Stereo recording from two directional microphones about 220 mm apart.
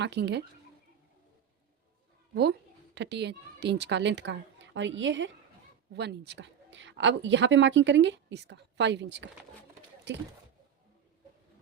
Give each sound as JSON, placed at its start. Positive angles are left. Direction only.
{"t": 0.0, "sound": "a woman's voice", "side_deg": -50}
{"t": 2.3, "sound": "a woman's voice", "side_deg": -50}